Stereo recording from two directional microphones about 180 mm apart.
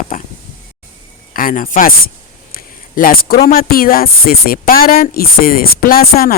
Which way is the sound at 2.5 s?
55° left (ahead or behind).